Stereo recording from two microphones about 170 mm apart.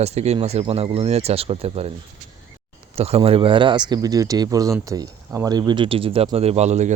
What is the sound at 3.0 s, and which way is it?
Speech, 35° right (ahead or behind).